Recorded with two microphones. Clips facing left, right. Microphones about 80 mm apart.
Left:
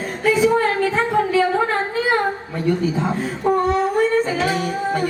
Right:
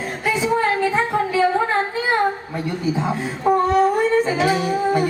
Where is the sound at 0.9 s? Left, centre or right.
Centre.